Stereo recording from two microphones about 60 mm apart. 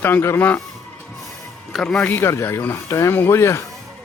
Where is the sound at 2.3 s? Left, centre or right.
Left.